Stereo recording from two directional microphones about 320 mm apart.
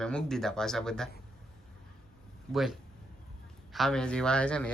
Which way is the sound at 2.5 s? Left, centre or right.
Centre.